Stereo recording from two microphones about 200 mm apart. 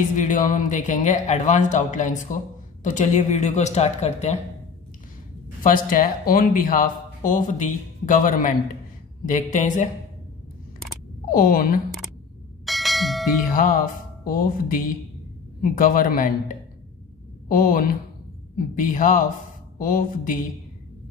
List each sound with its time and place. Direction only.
0.1 s speech: 40° left (ahead or behind)
5.6 s speech: 45° left (ahead or behind)
11.2 s speech: 45° left (ahead or behind)
12.6 s bell: centre (ahead or behind)
13.5 s music: 45° left (ahead or behind)
15.6 s speech: 45° left (ahead or behind)